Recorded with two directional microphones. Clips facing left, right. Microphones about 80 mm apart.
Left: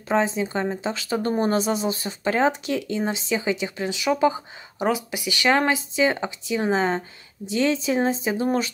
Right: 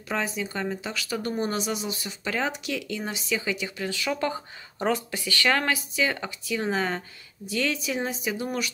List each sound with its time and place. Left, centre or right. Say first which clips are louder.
0.1 s speech: left 7 dB; left